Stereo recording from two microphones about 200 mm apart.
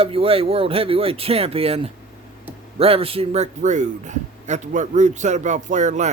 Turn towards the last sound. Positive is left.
turn(degrees=-35)  # may be behind; listen again after turning